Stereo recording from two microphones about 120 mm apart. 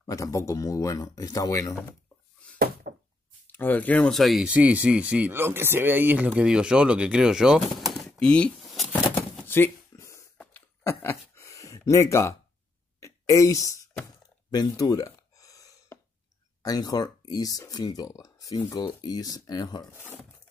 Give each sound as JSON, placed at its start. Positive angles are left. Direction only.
{"t": 0.0, "sound": "speech", "side_deg": 30}
{"t": 3.4, "sound": "speech", "side_deg": 15}
{"t": 4.5, "sound": "speech", "side_deg": -10}
{"t": 9.5, "sound": "bouncing", "side_deg": 20}
{"t": 10.3, "sound": "a sound", "side_deg": 10}
{"t": 10.9, "sound": "speech", "side_deg": 25}
{"t": 14.5, "sound": "gasp", "side_deg": 35}
{"t": 16.6, "sound": "speech", "side_deg": 30}
{"t": 19.9, "sound": "speech", "side_deg": 20}